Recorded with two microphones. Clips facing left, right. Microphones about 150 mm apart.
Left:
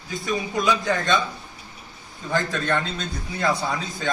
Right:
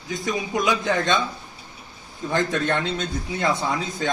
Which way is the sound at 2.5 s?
20° right (ahead or behind).